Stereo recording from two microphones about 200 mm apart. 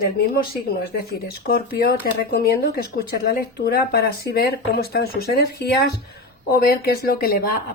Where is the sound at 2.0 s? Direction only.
50° left (ahead or behind).